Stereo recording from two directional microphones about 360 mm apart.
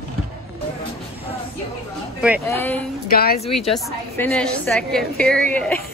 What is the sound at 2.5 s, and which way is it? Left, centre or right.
Speech, centre.